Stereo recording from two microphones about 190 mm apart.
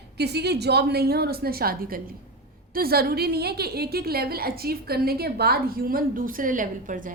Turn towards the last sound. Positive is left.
turn(degrees=-45)  # may be behind; listen again after turning